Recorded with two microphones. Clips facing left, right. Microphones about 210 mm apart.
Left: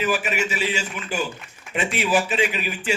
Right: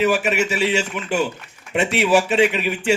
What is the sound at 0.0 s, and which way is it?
A man's voice, 65° right (ahead or behind).